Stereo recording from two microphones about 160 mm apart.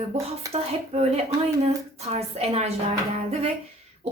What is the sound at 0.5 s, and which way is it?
Speech, 40° right (ahead or behind).